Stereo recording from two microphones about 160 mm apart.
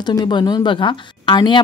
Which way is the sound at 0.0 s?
30° left (ahead or behind).